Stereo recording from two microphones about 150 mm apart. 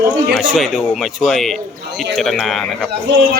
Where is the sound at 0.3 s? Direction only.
Centre (ahead or behind).